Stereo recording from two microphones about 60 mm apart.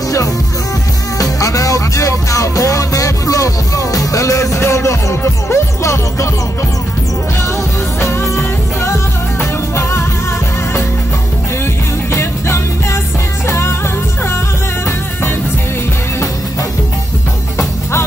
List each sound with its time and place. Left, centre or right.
1.1 s music: left
4.6 s music: left
8.0 s music: left
11.6 s music: left